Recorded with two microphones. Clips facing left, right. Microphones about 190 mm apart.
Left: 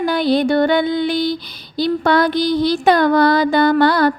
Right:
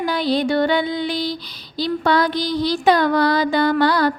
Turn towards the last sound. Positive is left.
turn(degrees=55)  # may be behind; listen again after turning